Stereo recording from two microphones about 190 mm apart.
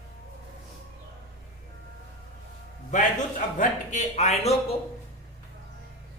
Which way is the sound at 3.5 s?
40° left (ahead or behind).